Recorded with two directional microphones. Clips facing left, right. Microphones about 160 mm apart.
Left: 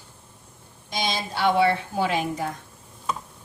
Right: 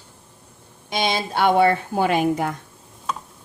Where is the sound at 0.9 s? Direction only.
60° right (ahead or behind).